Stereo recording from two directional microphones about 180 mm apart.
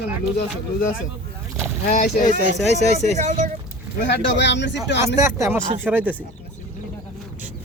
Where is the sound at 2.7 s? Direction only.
40° right (ahead or behind).